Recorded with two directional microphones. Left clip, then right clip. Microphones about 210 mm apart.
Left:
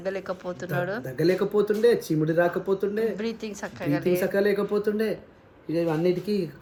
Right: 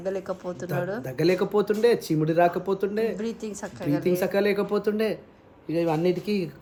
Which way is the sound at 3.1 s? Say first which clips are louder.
Even; 15° right (ahead or behind).